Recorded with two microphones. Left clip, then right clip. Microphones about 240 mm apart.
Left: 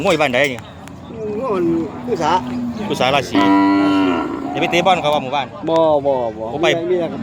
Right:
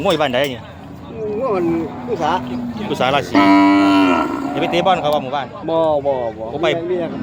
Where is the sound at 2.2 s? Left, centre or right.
Left.